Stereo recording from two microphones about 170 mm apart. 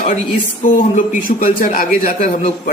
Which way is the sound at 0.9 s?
55° left (ahead or behind).